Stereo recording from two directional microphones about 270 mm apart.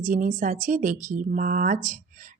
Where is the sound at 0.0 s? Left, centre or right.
Right.